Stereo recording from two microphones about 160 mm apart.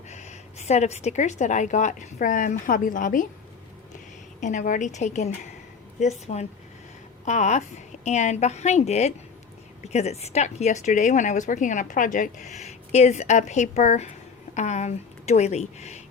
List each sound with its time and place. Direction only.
0.1 s a woman's voice: 45° left (ahead or behind)
4.4 s speech: 50° left (ahead or behind)